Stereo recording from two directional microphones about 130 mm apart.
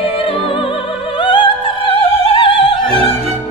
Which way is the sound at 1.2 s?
40° left (ahead or behind).